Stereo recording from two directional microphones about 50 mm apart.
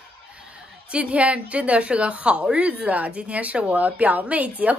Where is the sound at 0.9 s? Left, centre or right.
Right.